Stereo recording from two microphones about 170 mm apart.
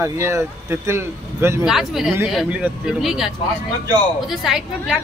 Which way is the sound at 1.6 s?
Centre (ahead or behind).